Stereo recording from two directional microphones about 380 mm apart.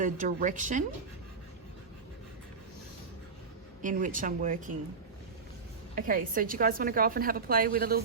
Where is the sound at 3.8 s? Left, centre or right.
Centre.